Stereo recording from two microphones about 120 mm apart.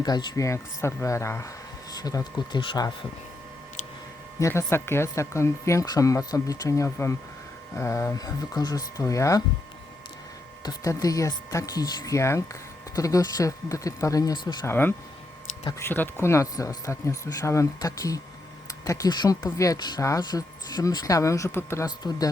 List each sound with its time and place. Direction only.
0.0 s speech: 35° left (ahead or behind)
0.4 s speech: 25° left (ahead or behind)
2.6 s speech: 45° left (ahead or behind)
4.4 s speech: 25° left (ahead or behind)
10.6 s speech: 30° left (ahead or behind)
14.7 s speech: 15° left (ahead or behind)
21.8 s speech: 35° left (ahead or behind)